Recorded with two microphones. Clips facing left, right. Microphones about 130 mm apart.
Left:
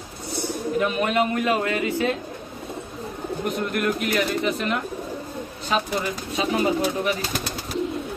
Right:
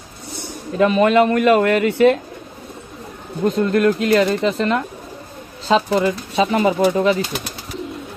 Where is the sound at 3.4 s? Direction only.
90° right.